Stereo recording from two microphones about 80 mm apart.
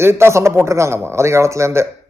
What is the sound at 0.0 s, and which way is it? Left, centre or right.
A man's voice, right.